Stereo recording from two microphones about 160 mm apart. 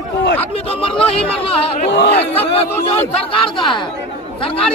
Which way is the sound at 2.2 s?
40° left (ahead or behind).